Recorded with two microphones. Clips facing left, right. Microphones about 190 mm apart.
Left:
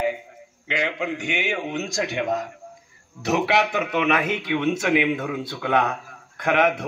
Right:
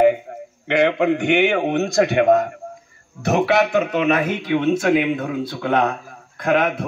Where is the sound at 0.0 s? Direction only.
60° right (ahead or behind).